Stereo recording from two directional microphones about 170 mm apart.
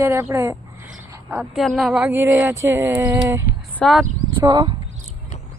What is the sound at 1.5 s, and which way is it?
Speech, centre (ahead or behind).